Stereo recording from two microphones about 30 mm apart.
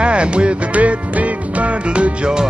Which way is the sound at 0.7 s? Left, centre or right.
Right.